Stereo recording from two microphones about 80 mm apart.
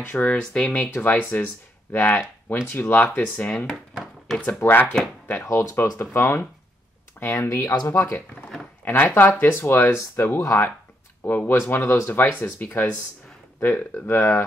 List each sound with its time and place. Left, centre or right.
0.0 s speech: left
0.4 s speech: centre
1.0 s speech: left
3.9 s a sound: centre
4.6 s speech: left
5.4 s speech: left
7.9 s speech: left
8.8 s speech: left
11.2 s speech: left